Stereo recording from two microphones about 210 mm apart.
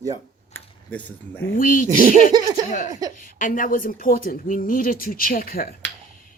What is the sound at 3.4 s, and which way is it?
Speech, 40° left (ahead or behind).